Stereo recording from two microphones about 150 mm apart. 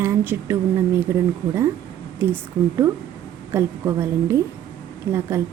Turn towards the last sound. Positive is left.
turn(degrees=-20)  # may be behind; listen again after turning